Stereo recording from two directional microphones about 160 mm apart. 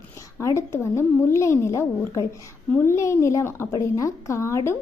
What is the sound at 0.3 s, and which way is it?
A woman's voice, 15° left (ahead or behind).